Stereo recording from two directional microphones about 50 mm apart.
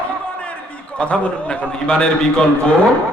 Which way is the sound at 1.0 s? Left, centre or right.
Left.